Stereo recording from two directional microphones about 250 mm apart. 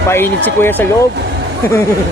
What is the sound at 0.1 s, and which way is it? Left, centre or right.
Speech, centre.